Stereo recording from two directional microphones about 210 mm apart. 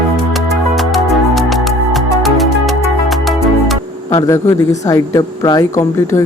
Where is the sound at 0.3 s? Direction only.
Centre (ahead or behind).